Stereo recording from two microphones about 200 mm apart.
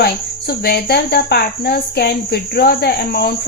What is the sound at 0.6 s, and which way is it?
Speech, 55° left (ahead or behind).